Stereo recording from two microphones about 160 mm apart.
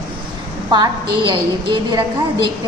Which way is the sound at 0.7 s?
30° right (ahead or behind).